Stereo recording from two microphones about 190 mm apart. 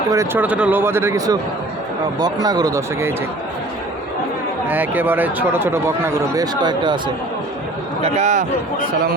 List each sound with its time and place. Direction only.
0.1 s speech: 15° right (ahead or behind)
4.7 s speech: 10° right (ahead or behind)
8.0 s a man's voice: 35° right (ahead or behind)